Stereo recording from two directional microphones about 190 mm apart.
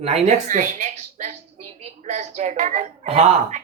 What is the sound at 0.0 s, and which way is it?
Speech, 35° right (ahead or behind).